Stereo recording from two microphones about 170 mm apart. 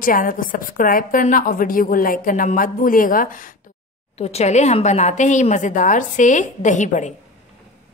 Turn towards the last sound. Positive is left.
turn(degrees=45)  # may be behind; listen again after turning